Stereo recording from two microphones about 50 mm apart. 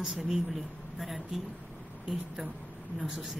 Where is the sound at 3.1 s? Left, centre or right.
Centre.